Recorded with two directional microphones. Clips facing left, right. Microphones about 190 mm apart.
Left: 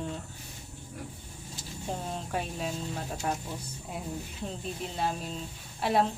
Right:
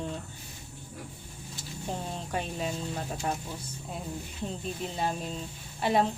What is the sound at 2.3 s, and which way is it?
Speech, centre (ahead or behind).